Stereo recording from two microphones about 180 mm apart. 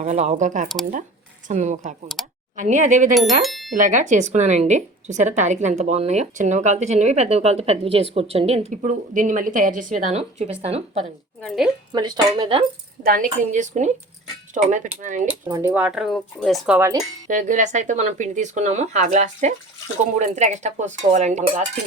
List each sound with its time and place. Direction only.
0.0 s a woman's voice: 40° right (ahead or behind)
2.2 s a sound: centre (ahead or behind)
2.6 s a woman's voice: 40° right (ahead or behind)
3.4 s speech: centre (ahead or behind)
3.8 s a woman's voice: 45° right (ahead or behind)
8.7 s a woman's voice: 45° right (ahead or behind)
11.4 s a woman's voice: centre (ahead or behind)
11.9 s speech: 25° right (ahead or behind)
13.0 s a woman's voice: 50° right (ahead or behind)
15.4 s speech: 15° right (ahead or behind)
17.2 s a woman's voice: 45° right (ahead or behind)